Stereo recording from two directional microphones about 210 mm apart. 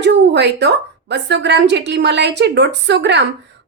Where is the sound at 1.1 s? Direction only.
55° right (ahead or behind).